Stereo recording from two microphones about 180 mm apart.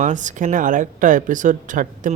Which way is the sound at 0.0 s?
45° right (ahead or behind).